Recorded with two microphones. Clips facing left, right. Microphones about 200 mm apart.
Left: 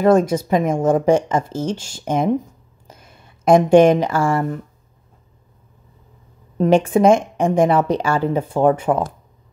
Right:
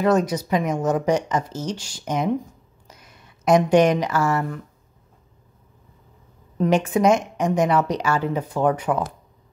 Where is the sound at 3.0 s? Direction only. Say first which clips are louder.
Left 3 dB; 30° left (ahead or behind).